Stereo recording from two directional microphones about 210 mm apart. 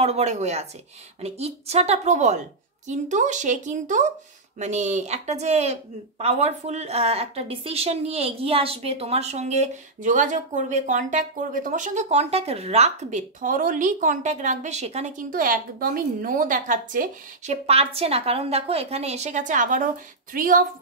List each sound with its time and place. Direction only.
0.0 s speech: 30° right (ahead or behind)